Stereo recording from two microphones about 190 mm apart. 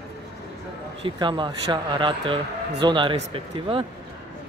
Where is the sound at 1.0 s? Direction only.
25° right (ahead or behind).